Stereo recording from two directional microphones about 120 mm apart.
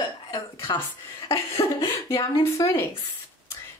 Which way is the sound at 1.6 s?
25° left (ahead or behind).